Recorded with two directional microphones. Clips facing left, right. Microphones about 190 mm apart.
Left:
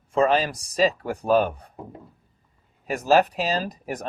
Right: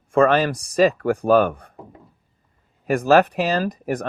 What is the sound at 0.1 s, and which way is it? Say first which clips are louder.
Speech: right 4 dB; 55° right (ahead or behind).